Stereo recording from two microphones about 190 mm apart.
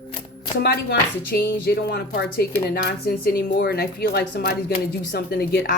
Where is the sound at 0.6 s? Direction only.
55° left (ahead or behind).